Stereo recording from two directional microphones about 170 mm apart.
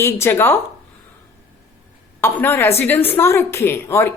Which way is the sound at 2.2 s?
15° left (ahead or behind).